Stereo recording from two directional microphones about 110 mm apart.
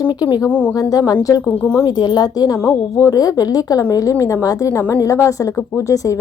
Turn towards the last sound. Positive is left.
turn(degrees=30)  # may be behind; listen again after turning